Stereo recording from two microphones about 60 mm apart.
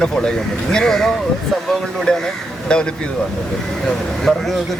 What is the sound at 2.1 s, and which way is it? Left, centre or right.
Speech, centre.